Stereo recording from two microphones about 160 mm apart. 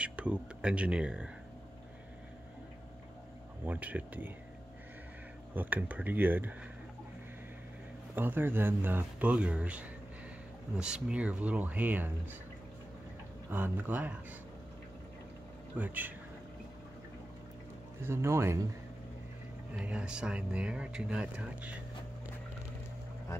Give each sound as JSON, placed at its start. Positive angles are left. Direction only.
{"t": 0.0, "sound": "speech", "side_deg": -10}
{"t": 3.6, "sound": "speech", "side_deg": -10}
{"t": 5.5, "sound": "speech", "side_deg": -10}
{"t": 8.2, "sound": "speech", "side_deg": -10}
{"t": 13.5, "sound": "speech", "side_deg": -10}
{"t": 15.8, "sound": "speech", "side_deg": -10}
{"t": 18.0, "sound": "speech", "side_deg": -15}
{"t": 19.8, "sound": "speech", "side_deg": -5}